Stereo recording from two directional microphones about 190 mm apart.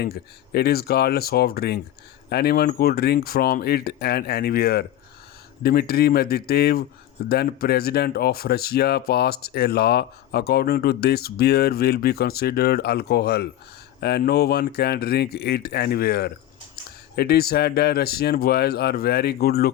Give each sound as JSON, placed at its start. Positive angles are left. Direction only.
{"t": 0.0, "sound": "speech", "side_deg": 55}